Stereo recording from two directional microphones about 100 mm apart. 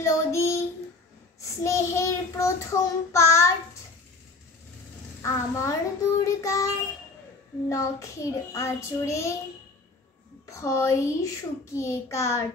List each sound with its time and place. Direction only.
0.0 s child singing: 30° left (ahead or behind)
5.2 s a child's voice: 30° left (ahead or behind)
6.2 s child singing: 30° left (ahead or behind)
7.6 s a child's voice: 30° left (ahead or behind)
10.4 s a child's voice: 30° left (ahead or behind)